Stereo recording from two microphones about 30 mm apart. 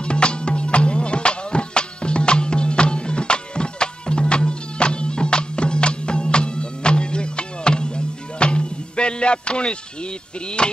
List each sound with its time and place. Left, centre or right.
0.0 s music: left
10.6 s speech: left